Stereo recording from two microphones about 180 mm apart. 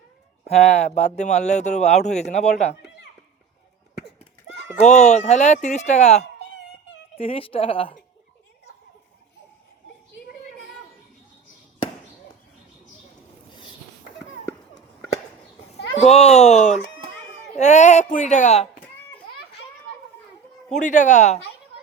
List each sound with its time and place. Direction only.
0.4 s speech: 35° left (ahead or behind)
4.7 s speech: 40° left (ahead or behind)
16.0 s speech: 35° left (ahead or behind)
20.7 s speech: 45° left (ahead or behind)